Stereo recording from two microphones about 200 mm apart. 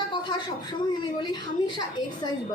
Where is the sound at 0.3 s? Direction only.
20° left (ahead or behind).